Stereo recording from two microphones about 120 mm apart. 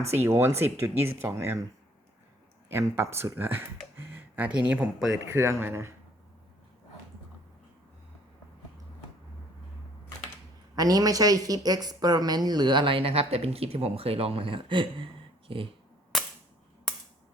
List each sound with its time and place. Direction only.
0.1 s speech: 20° right (ahead or behind)
2.6 s speech: 20° right (ahead or behind)
5.2 s speech: 20° right (ahead or behind)
10.8 s a woman's voice: 30° right (ahead or behind); by 15.6 s 45° right (ahead or behind)